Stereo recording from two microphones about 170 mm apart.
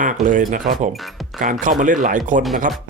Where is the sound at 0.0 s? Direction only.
50° right (ahead or behind).